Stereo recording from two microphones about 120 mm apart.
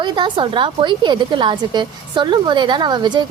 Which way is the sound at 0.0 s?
40° right (ahead or behind).